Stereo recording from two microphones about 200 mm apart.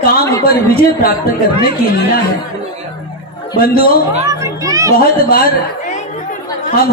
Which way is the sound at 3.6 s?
50° left (ahead or behind).